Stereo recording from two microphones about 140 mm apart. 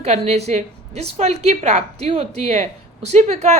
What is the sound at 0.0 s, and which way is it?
A woman's voice, 50° right (ahead or behind).